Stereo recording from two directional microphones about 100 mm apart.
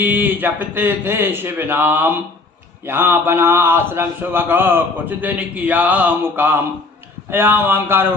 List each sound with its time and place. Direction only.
0.0 s a man's voice: 20° right (ahead or behind)